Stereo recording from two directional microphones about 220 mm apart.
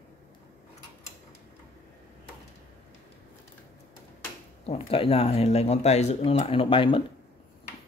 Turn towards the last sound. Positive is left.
turn(degrees=25)  # may be behind; listen again after turning